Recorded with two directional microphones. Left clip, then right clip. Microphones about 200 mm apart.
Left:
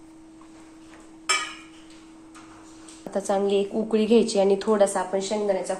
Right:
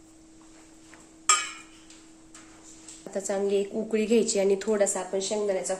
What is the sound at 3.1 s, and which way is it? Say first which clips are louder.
A woman's voice: left 4 dB; 15° right (ahead or behind).